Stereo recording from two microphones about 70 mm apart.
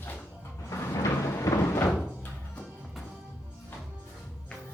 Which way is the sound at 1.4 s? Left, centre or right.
Left.